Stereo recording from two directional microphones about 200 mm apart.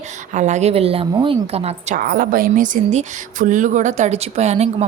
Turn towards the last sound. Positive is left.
turn(degrees=-30)  # may be behind; listen again after turning